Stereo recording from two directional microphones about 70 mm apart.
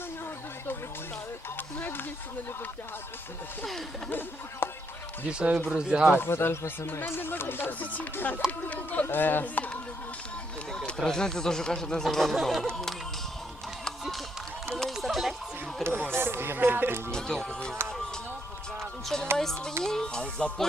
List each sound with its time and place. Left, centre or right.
1.5 s speech: left
4.6 s speech: left
5.3 s speech: centre
6.1 s speech: left
10.7 s speech: centre
14.0 s a sound: centre
15.8 s speech: centre
16.1 s speech: right
17.1 s speech: centre
18.8 s music: centre
19.4 s speech: centre